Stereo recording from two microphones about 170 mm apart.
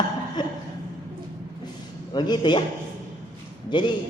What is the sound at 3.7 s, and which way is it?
Speech, 25° left (ahead or behind).